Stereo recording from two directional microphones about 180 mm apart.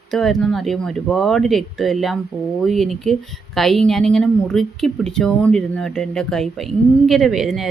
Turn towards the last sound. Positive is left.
turn(degrees=0)  # may be behind; listen again after turning